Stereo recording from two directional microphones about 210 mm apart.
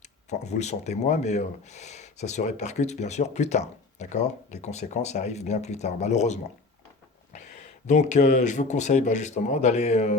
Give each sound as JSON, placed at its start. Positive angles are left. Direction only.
{"t": 0.3, "sound": "speech", "side_deg": 35}